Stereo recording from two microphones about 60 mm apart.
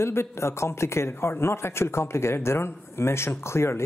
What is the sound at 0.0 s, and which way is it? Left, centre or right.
Speech, left.